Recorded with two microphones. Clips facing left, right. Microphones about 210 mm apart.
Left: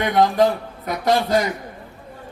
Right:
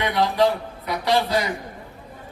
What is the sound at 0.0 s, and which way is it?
A man's voice, 45° left (ahead or behind).